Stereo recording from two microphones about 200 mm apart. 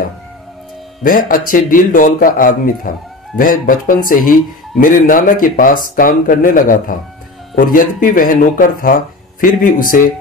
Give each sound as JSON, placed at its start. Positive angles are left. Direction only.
{"t": 1.0, "sound": "speech", "side_deg": 45}